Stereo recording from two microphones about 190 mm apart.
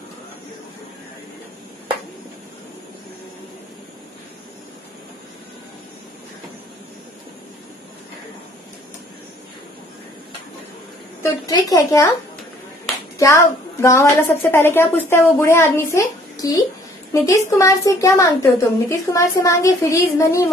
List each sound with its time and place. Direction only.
11.4 s a woman's voice: 15° left (ahead or behind)
13.2 s a woman's voice: 15° left (ahead or behind)